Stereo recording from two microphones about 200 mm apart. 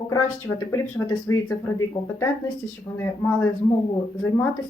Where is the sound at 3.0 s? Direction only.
10° left (ahead or behind).